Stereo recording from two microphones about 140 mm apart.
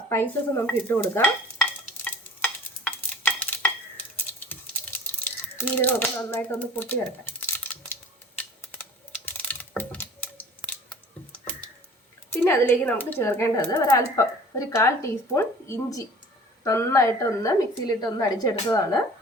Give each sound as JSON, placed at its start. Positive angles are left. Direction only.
{"t": 0.1, "sound": "speech", "side_deg": 15}
{"t": 1.8, "sound": "stir", "side_deg": 10}
{"t": 8.4, "sound": "typing", "side_deg": 10}
{"t": 10.6, "sound": "a sound", "side_deg": 25}
{"t": 12.3, "sound": "speech", "side_deg": 15}